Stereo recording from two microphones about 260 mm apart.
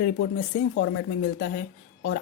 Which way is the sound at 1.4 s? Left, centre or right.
Left.